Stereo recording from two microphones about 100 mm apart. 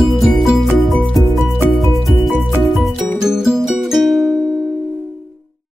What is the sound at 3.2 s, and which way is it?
Music, 5° right (ahead or behind).